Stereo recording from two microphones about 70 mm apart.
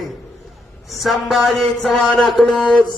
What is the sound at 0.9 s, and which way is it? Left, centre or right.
Speech, centre.